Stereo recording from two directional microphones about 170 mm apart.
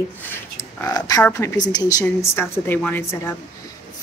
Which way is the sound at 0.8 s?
20° left (ahead or behind).